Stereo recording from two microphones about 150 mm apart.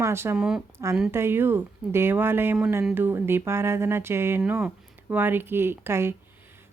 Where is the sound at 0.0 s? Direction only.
15° right (ahead or behind).